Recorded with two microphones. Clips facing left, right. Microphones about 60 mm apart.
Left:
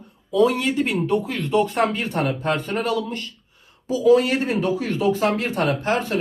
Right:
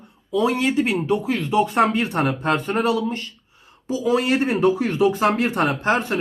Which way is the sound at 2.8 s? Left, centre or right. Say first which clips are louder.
Right 3 dB; right.